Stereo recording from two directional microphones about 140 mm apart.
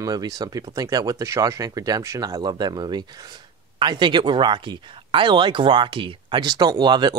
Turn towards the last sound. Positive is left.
turn(degrees=-30)  # may be behind; listen again after turning